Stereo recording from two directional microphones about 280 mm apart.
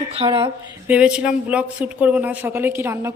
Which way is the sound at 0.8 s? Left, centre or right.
Centre.